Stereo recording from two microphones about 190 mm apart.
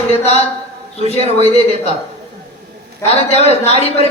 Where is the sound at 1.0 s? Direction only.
35° left (ahead or behind).